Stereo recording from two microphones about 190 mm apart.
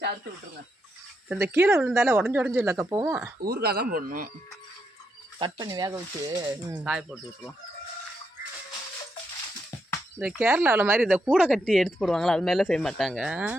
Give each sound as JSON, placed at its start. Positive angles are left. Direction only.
{"t": 1.7, "sound": "speech", "side_deg": -10}
{"t": 3.4, "sound": "speech", "side_deg": -55}
{"t": 5.4, "sound": "speech", "side_deg": -20}
{"t": 6.7, "sound": "speech", "side_deg": -5}
{"t": 10.2, "sound": "speech", "side_deg": -5}